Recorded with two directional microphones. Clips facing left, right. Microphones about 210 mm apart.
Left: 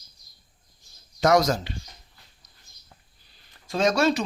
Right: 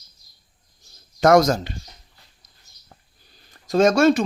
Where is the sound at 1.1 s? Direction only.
50° right (ahead or behind).